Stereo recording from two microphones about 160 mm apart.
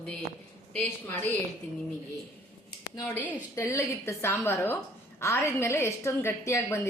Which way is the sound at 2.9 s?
15° left (ahead or behind).